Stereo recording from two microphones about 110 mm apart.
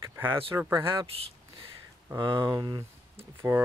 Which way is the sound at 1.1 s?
55° right (ahead or behind).